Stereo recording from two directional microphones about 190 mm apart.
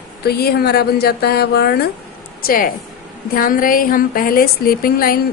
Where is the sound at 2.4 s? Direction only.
45° left (ahead or behind).